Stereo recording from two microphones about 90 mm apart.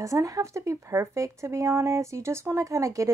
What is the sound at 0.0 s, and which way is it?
A woman's voice, 35° right (ahead or behind).